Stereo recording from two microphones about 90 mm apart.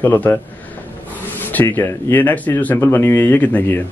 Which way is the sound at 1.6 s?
25° left (ahead or behind).